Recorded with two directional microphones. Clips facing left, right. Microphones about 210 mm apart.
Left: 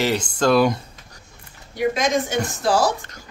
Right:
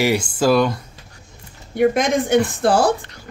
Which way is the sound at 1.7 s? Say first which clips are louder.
Right 4 dB; 55° right (ahead or behind).